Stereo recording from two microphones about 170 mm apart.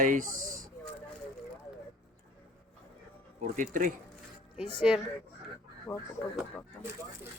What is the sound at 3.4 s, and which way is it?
Speech, 50° right (ahead or behind).